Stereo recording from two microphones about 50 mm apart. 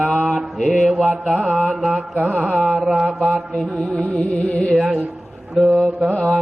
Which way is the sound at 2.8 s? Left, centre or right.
Centre.